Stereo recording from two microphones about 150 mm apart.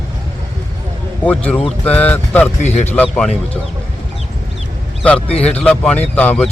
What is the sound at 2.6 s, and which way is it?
Speech, 50° left (ahead or behind).